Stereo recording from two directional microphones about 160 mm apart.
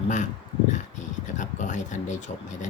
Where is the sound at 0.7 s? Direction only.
50° left (ahead or behind).